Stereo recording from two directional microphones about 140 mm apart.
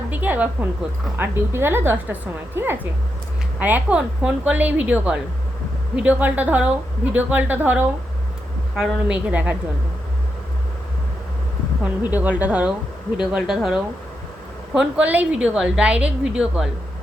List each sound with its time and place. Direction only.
0.1 s a sound: 10° right (ahead or behind)
1.2 s a woman's voice: 15° right (ahead or behind)
11.8 s a woman's voice: 10° right (ahead or behind)